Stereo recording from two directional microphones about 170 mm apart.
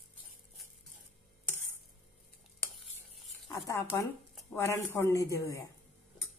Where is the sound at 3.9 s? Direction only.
15° left (ahead or behind).